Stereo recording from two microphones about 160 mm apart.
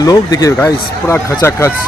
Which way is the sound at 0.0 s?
25° left (ahead or behind).